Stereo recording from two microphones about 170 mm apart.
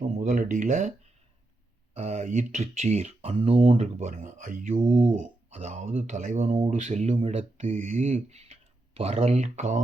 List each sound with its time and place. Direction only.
0.2 s speech: 50° right (ahead or behind)